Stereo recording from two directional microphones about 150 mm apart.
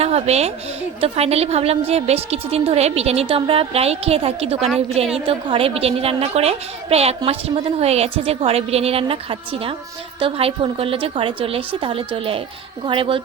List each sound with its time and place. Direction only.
0.0 s a woman's voice: 45° right (ahead or behind)